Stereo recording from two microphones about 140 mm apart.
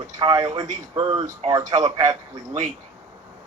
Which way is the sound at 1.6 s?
55° right (ahead or behind).